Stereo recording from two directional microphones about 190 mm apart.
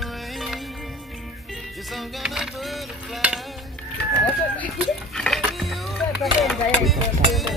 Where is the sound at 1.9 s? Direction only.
Centre (ahead or behind).